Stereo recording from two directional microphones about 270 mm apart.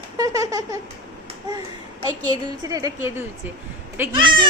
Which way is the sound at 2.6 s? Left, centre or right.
Centre.